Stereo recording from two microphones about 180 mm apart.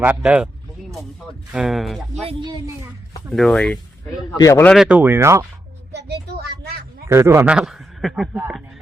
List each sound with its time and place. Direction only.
0.0 s speech: 10° right (ahead or behind)
1.5 s a man's voice: centre (ahead or behind)
2.2 s speech: 25° right (ahead or behind)
3.3 s speech: centre (ahead or behind); by 4.6 s 15° left (ahead or behind)
4.6 s speech: centre (ahead or behind)
5.9 s a sound: 70° right (ahead or behind)
7.1 s a man's voice: 15° right (ahead or behind)